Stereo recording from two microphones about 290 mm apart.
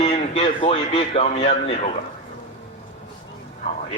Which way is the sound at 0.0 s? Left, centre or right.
Left.